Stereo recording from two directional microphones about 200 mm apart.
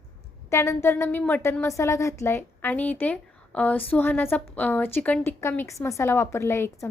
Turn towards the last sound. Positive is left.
turn(degrees=15)  # may be behind; listen again after turning